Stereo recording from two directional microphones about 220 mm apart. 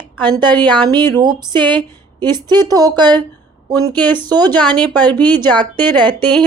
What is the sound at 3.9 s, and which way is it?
Speech, 10° left (ahead or behind).